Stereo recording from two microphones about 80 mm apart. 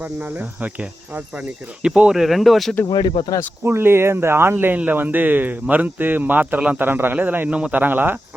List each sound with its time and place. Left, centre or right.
0.0 s cricket: right; by 2.7 s centre
2.8 s speech: left
3.6 s speech: right